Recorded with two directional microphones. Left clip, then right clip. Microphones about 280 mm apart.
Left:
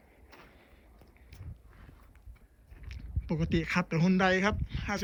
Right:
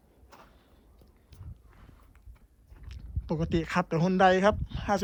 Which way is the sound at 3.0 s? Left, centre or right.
Centre.